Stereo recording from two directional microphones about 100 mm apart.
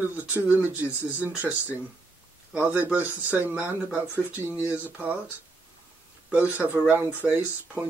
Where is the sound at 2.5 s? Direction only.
15° right (ahead or behind).